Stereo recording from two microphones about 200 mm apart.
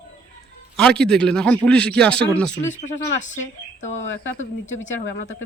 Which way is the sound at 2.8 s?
35° left (ahead or behind).